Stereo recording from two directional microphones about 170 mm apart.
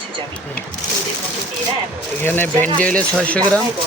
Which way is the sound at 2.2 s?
10° left (ahead or behind).